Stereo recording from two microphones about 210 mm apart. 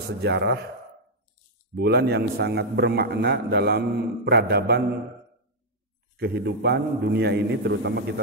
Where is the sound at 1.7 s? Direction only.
50° right (ahead or behind).